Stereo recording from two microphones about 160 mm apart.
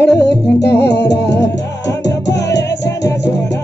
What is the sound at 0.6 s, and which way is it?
Music, 90° left.